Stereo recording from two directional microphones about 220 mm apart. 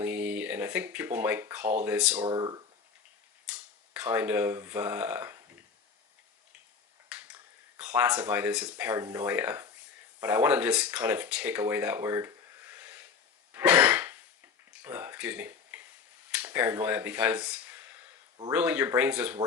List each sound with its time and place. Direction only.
0.0 s a sound: 5° right (ahead or behind)
1.8 s speech: 5° right (ahead or behind)
2.2 s speech: 20° right (ahead or behind)
3.4 s speech: 5° right (ahead or behind)
7.1 s finger snapping: 5° right (ahead or behind)
7.8 s speech: 5° right (ahead or behind)
13.5 s cough: 10° right (ahead or behind)
14.7 s a sound: 5° right (ahead or behind)
16.3 s speech: 10° right (ahead or behind)